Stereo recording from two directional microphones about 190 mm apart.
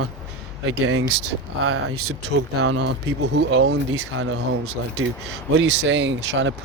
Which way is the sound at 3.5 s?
90° right.